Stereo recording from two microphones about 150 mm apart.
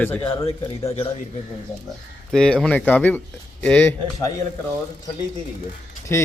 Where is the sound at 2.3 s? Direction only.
5° left (ahead or behind).